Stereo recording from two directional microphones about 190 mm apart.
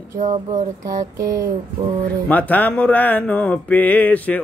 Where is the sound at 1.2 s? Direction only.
20° right (ahead or behind).